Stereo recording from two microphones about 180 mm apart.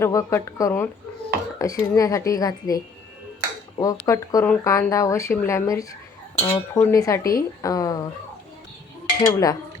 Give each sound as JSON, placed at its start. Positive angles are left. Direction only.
{"t": 0.0, "sound": "speech", "side_deg": 15}
{"t": 9.2, "sound": "speech", "side_deg": 20}